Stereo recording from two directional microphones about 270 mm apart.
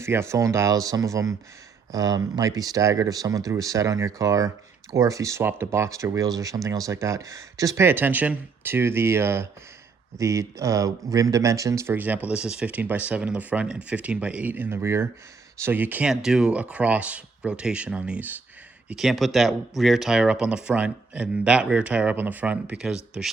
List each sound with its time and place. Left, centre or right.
0.0 s speech: centre